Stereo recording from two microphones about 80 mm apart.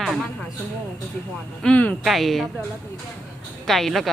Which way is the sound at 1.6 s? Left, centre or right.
Centre.